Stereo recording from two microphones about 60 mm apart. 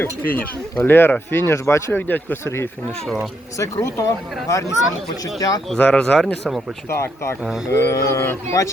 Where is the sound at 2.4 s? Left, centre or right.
Left.